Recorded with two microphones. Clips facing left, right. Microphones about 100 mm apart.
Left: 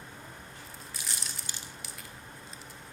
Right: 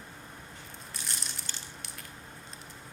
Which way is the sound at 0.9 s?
Centre (ahead or behind).